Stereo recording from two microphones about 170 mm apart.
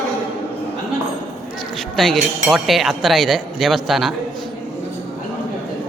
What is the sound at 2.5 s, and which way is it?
Speech, centre (ahead or behind).